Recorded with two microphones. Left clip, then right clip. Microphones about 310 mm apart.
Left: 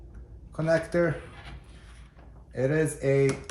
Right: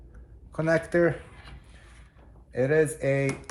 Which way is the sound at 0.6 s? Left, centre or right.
Centre.